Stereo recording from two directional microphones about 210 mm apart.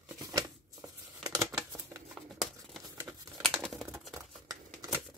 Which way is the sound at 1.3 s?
15° right (ahead or behind).